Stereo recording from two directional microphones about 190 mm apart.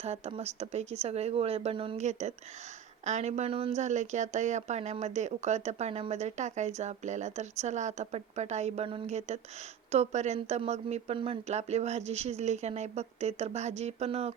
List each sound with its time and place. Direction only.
0.0 s speech: 35° right (ahead or behind)